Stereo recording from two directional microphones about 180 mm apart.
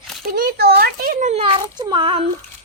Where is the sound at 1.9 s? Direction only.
30° right (ahead or behind).